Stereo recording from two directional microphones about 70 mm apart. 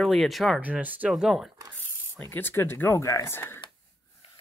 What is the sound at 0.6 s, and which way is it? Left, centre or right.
Speech, right.